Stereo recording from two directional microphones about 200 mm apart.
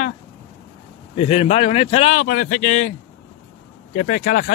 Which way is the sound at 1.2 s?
30° left (ahead or behind).